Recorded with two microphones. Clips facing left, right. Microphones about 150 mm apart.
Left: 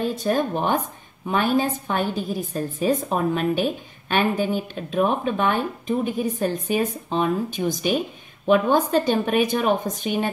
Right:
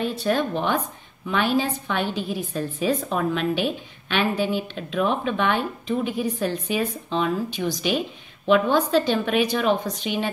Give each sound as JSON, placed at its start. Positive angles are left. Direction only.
{"t": 0.0, "sound": "a woman's voice", "side_deg": 45}